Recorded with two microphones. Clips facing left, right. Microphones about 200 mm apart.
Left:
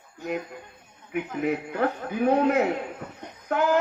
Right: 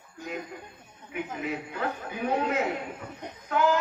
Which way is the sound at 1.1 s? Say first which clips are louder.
Left 6 dB; 55° left (ahead or behind).